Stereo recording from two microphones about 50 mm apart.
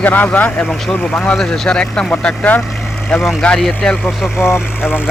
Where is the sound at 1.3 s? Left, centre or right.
Centre.